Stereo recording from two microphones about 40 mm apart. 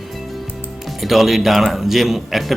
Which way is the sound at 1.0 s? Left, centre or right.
Centre.